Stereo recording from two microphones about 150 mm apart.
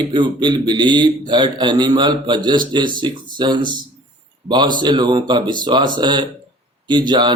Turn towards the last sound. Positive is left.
turn(degrees=-30)  # may be behind; listen again after turning